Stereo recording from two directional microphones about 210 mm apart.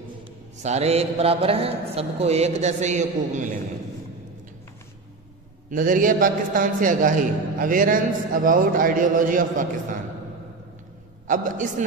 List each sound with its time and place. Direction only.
0.6 s a man's voice: 30° right (ahead or behind)
5.7 s a man's voice: 40° right (ahead or behind)
11.2 s a man's voice: 40° right (ahead or behind)